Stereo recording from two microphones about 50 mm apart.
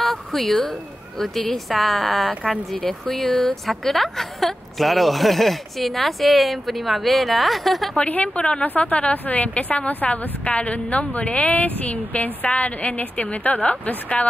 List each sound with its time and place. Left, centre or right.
0.0 s a sound: centre
1.2 s a woman's voice: centre
3.1 s a woman's voice: left
3.6 s a woman's voice: centre
8.1 s a woman's voice: left